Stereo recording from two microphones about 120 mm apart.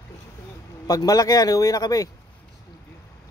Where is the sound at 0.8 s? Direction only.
30° left (ahead or behind).